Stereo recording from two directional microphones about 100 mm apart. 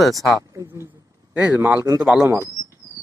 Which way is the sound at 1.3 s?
15° right (ahead or behind).